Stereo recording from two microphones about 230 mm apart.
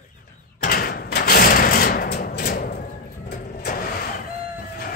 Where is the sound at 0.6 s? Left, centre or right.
Left.